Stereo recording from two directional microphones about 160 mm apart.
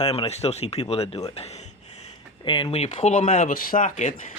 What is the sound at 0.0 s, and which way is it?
Speech, 40° left (ahead or behind).